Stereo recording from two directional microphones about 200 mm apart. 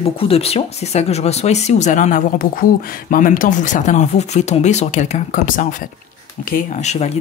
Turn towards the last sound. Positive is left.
turn(degrees=35)  # may be behind; listen again after turning